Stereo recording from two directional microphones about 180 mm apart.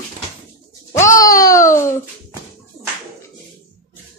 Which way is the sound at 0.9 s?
15° left (ahead or behind).